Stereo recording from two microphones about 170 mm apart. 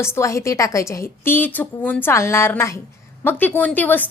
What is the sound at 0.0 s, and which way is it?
A woman's voice, 15° left (ahead or behind).